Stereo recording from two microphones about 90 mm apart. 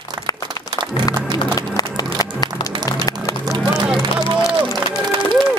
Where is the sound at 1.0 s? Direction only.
45° left (ahead or behind).